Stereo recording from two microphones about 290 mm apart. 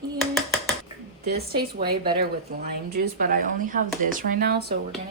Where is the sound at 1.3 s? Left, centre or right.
Right.